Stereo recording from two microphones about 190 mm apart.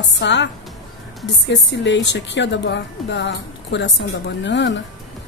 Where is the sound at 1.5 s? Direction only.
70° left (ahead or behind).